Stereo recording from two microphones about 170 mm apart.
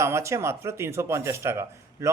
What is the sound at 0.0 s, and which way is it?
Speech, 15° right (ahead or behind).